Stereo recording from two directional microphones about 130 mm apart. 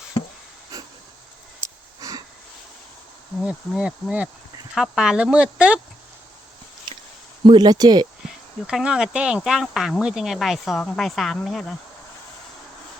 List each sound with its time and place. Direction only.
0.7 s hiss: 25° right (ahead or behind)
1.6 s a sound: 25° right (ahead or behind)
3.4 s speech: 5° right (ahead or behind)
7.4 s speech: 35° right (ahead or behind)
8.6 s speech: 5° right (ahead or behind)